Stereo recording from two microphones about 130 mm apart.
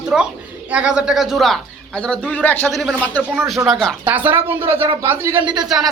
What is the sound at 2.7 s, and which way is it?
Speech, centre (ahead or behind).